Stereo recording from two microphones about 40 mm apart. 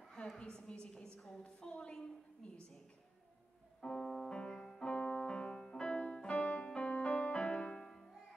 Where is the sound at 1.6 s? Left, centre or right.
Left.